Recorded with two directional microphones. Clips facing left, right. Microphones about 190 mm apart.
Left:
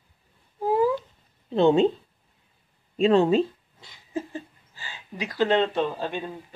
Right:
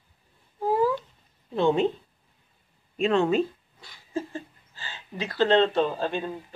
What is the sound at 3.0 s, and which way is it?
Speech, 35° left (ahead or behind).